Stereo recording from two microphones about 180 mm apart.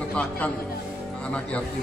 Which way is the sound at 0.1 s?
5° left (ahead or behind).